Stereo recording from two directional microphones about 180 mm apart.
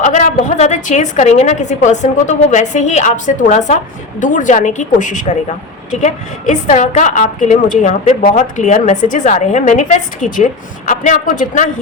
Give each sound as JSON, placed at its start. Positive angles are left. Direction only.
{"t": 0.0, "sound": "a woman's voice", "side_deg": 45}